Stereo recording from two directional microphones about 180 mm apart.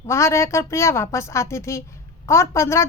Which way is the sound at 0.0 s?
15° left (ahead or behind).